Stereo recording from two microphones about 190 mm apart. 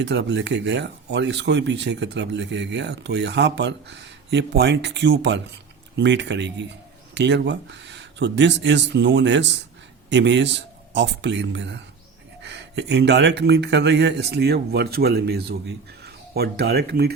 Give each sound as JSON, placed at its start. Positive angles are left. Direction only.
{"t": 0.0, "sound": "speech", "side_deg": -65}